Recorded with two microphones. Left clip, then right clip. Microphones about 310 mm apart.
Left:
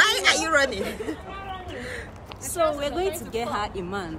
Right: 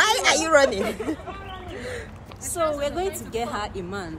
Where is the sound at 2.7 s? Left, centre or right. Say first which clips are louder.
Even; centre.